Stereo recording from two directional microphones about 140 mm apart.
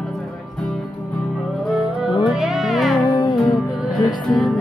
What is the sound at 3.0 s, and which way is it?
Music, 30° left (ahead or behind).